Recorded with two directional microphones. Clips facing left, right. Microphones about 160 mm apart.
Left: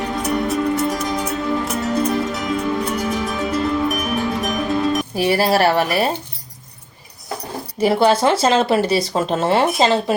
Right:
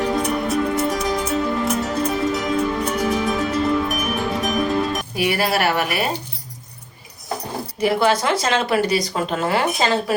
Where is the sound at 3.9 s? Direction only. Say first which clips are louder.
Left 2 dB; centre (ahead or behind).